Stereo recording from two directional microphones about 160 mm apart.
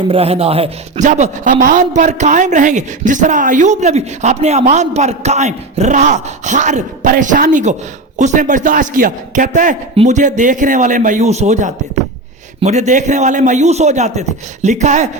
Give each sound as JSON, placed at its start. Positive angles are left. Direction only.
{"t": 0.1, "sound": "speech", "side_deg": -40}